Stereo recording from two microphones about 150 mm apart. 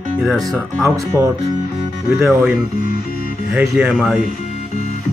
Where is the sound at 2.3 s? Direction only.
5° right (ahead or behind).